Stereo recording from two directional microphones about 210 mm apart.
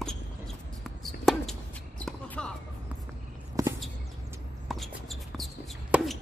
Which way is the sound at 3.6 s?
15° right (ahead or behind).